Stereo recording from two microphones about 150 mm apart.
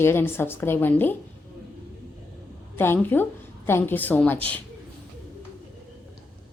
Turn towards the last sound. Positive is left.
turn(degrees=10)  # may be behind; listen again after turning